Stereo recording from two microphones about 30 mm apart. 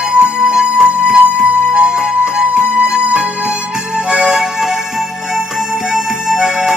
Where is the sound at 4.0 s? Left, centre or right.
Right.